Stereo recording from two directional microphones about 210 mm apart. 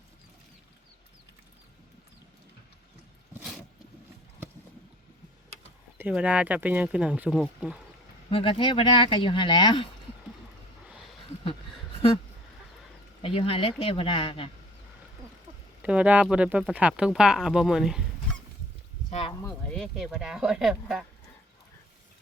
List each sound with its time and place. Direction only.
6.0 s speech: 5° right (ahead or behind)
8.3 s speech: 25° left (ahead or behind)
10.8 s a sound: 5° right (ahead or behind)
13.2 s speech: 25° left (ahead or behind)
15.8 s speech: 5° right (ahead or behind)
19.4 s speech: 5° left (ahead or behind)